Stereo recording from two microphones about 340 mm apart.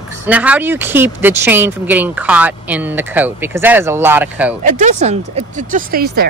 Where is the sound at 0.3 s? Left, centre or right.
Centre.